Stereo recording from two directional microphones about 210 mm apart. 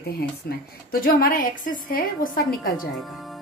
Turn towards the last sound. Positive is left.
turn(degrees=0)  # may be behind; listen again after turning